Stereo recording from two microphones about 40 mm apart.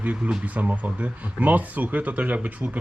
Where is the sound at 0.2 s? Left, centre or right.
Right.